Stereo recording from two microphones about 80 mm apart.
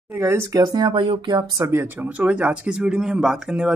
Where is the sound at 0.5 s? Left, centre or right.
Right.